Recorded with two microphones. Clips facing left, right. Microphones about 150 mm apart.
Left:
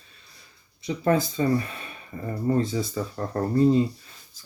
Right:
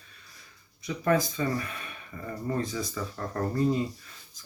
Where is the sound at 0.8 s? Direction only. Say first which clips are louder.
Left 3 dB; 30° left (ahead or behind).